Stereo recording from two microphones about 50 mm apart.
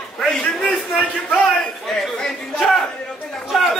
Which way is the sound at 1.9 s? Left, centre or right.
Centre.